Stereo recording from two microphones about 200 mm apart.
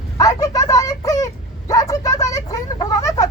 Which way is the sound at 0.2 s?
15° left (ahead or behind).